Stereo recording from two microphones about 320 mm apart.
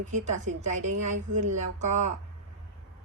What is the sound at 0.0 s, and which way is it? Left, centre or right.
A woman's voice, right.